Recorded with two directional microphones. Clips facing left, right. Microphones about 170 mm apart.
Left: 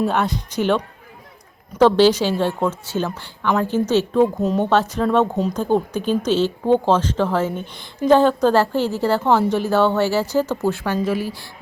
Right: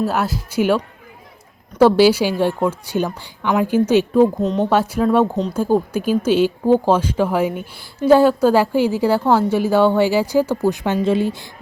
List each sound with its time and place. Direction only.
0.0 s speech: 5° right (ahead or behind)
1.8 s a woman's voice: 10° right (ahead or behind)
4.4 s speech: 5° left (ahead or behind)
4.7 s a woman's voice: 10° right (ahead or behind)
10.8 s a woman's voice: 25° right (ahead or behind)